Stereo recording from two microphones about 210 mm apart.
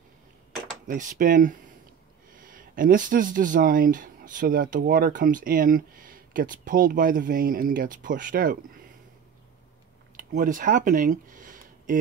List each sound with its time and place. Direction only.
0.8 s speech: 40° right (ahead or behind)
10.1 s speech: 40° right (ahead or behind)